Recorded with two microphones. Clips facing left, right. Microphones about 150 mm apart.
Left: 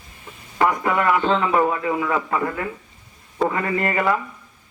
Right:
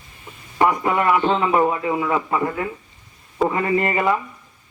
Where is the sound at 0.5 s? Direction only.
25° right (ahead or behind).